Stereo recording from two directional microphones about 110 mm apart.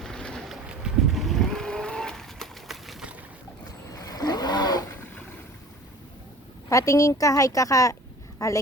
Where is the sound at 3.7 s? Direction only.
35° left (ahead or behind).